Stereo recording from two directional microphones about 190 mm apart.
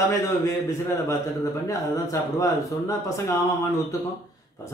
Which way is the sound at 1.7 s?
15° left (ahead or behind).